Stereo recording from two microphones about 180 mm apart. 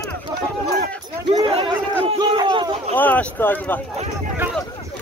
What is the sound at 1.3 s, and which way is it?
Crowd, 30° right (ahead or behind).